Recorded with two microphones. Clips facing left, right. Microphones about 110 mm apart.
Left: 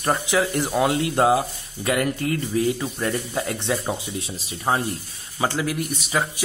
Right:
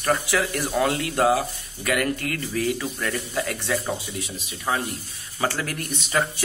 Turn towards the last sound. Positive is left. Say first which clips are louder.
# even
turn(degrees=10)  # may be behind; listen again after turning